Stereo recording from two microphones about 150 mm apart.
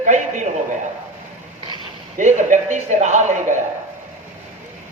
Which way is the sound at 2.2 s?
55° right (ahead or behind).